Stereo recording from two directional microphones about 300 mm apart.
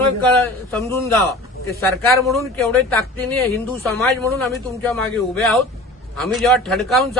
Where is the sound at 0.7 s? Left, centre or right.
Centre.